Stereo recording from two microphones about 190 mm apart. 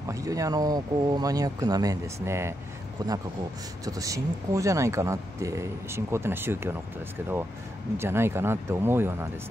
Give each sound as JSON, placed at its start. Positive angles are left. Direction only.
{"t": 0.1, "sound": "speech", "side_deg": -15}
{"t": 8.0, "sound": "speech", "side_deg": -15}